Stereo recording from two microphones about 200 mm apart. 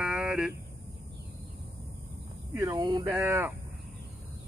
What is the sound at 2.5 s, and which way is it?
Speech, 15° right (ahead or behind).